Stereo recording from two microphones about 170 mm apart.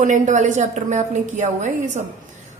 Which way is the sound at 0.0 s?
45° right (ahead or behind).